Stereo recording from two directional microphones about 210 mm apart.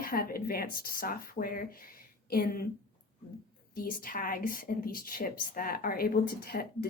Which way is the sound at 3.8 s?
45° left (ahead or behind).